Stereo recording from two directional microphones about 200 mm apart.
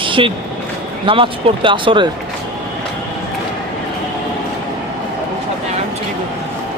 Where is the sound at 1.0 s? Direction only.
25° right (ahead or behind).